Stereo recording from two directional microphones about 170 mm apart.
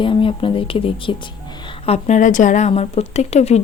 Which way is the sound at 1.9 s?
45° left (ahead or behind).